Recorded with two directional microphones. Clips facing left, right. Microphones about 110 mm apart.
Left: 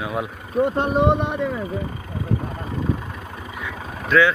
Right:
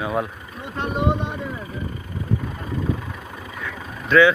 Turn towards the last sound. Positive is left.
turn(degrees=0)  # may be behind; listen again after turning